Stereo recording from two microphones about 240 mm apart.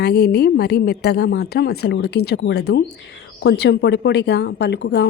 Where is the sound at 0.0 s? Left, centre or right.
Left.